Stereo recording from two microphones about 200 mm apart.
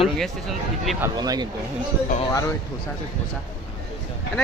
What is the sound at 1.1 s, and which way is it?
Speech, 20° right (ahead or behind).